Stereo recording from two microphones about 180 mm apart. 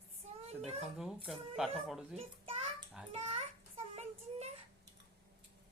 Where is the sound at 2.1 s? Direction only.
35° right (ahead or behind).